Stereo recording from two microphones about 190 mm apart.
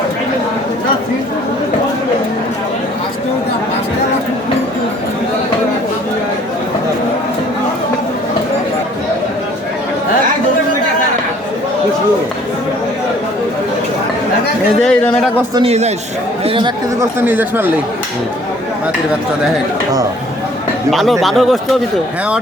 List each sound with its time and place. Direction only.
14.8 s a sound: 5° left (ahead or behind)
15.5 s a man's voice: 30° right (ahead or behind)
17.0 s speech: 10° right (ahead or behind)
20.9 s speech: centre (ahead or behind)